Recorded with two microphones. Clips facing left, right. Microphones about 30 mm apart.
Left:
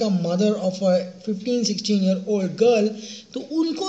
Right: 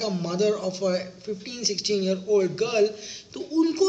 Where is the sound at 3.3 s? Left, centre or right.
Left.